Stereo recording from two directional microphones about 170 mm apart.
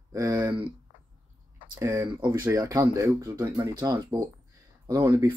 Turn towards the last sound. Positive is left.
turn(degrees=-20)  # may be behind; listen again after turning